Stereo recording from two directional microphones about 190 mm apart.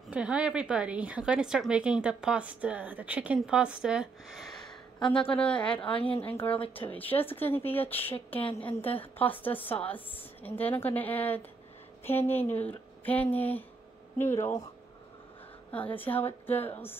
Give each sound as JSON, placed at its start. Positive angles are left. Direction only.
{"t": 0.1, "sound": "a woman's voice", "side_deg": -5}
{"t": 4.9, "sound": "a woman's voice", "side_deg": 25}
{"t": 5.3, "sound": "a woman's voice", "side_deg": 5}
{"t": 5.8, "sound": "a woman's voice", "side_deg": 30}
{"t": 6.2, "sound": "a woman's voice", "side_deg": 10}
{"t": 8.5, "sound": "a woman's voice", "side_deg": 30}
{"t": 9.2, "sound": "a woman's voice", "side_deg": 10}
{"t": 15.7, "sound": "a woman's voice", "side_deg": 10}